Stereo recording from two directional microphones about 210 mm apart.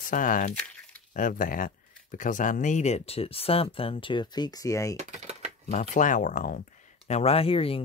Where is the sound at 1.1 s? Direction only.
40° left (ahead or behind); by 5.0 s 15° left (ahead or behind).